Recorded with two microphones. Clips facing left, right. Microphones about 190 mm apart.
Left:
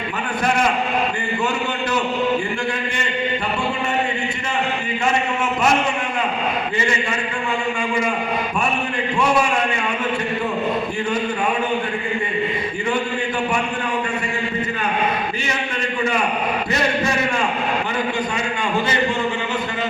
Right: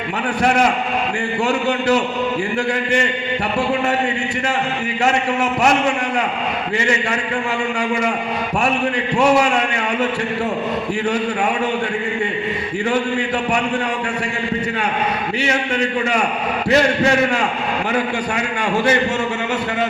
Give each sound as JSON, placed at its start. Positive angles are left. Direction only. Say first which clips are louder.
{"t": 16.6, "sound": "chant", "louder": "right 9 dB", "side_deg": -70}